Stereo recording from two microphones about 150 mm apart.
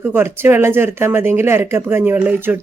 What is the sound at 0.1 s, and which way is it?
Speech, 15° right (ahead or behind).